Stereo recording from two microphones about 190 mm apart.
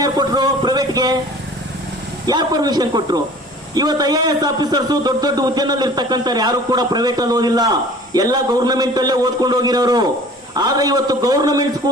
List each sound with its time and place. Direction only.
0.0 s speech: 20° right (ahead or behind)
2.2 s a man's voice: 20° right (ahead or behind)